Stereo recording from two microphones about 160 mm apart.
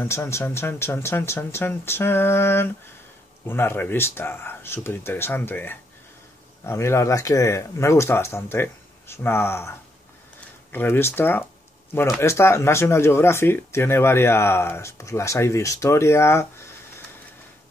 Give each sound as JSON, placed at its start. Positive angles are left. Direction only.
{"t": 0.0, "sound": "speech", "side_deg": 15}